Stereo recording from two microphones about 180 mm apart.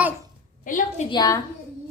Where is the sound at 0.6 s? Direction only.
45° left (ahead or behind).